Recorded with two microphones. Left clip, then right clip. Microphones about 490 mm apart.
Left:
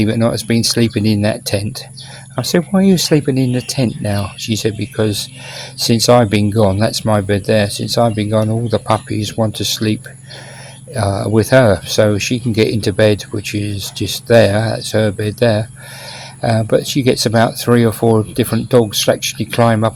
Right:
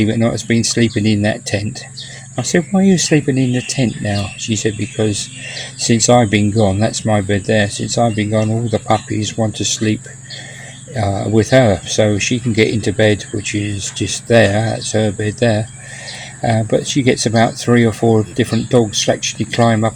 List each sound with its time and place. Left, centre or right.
0.1 s speech: left